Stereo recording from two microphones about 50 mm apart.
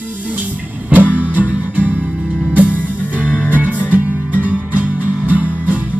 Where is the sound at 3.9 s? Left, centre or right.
Right.